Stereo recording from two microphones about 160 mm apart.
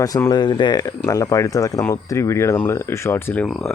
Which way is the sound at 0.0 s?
20° left (ahead or behind).